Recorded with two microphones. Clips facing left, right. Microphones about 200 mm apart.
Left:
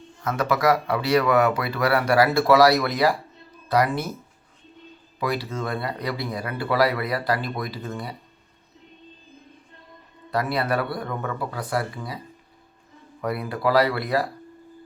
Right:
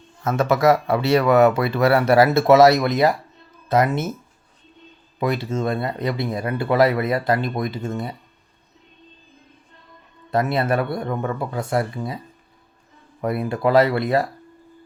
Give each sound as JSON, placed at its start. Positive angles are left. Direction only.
{"t": 0.3, "sound": "speech", "side_deg": -25}
{"t": 5.2, "sound": "speech", "side_deg": -25}
{"t": 10.3, "sound": "speech", "side_deg": -25}
{"t": 13.2, "sound": "speech", "side_deg": -25}